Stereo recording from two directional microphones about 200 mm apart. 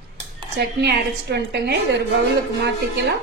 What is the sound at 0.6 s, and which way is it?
A woman's voice, 55° right (ahead or behind).